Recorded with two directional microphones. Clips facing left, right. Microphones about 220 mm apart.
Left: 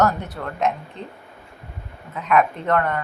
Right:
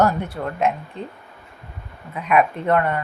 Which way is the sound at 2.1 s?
10° right (ahead or behind).